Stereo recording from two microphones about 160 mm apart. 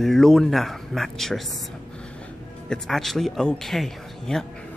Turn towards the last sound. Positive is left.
turn(degrees=5)  # may be behind; listen again after turning